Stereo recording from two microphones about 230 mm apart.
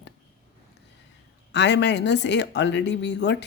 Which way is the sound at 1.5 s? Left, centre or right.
Left.